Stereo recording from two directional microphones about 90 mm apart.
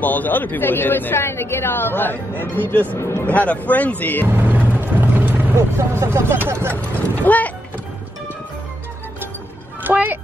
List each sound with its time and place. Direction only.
0.0 s speech: 20° left (ahead or behind)
3.0 s speech: 30° left (ahead or behind)
3.3 s speech: 15° left (ahead or behind)
4.4 s vehicle: 20° right (ahead or behind)
5.6 s speech: 30° right (ahead or behind)
6.7 s speech: 15° left (ahead or behind)
9.8 s speech: 20° right (ahead or behind)